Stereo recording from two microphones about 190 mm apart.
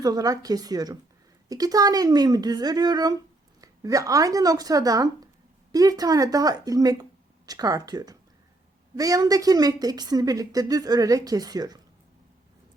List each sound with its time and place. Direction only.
0.0 s a woman's voice: 20° right (ahead or behind)